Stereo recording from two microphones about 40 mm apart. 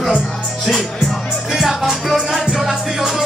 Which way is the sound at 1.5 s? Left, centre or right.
Centre.